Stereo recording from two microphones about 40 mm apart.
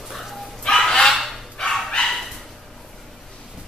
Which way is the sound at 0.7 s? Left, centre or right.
Centre.